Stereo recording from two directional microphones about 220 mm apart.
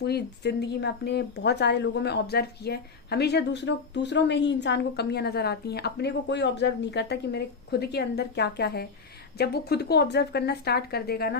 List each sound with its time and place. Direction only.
0.0 s speech: 50° left (ahead or behind)